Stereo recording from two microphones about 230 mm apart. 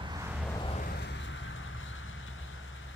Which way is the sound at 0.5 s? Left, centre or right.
Left.